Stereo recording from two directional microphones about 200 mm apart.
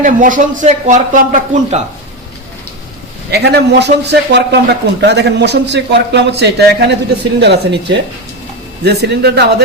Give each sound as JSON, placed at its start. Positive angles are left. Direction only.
{"t": 0.0, "sound": "speech", "side_deg": -40}
{"t": 3.3, "sound": "a man's voice", "side_deg": -55}